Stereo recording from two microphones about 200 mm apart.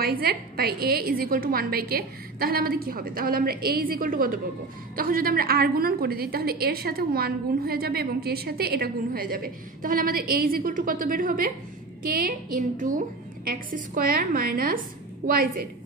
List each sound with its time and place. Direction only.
0.0 s a woman's voice: 50° right (ahead or behind)